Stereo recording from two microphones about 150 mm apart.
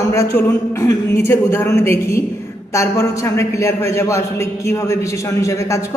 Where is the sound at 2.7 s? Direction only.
20° left (ahead or behind).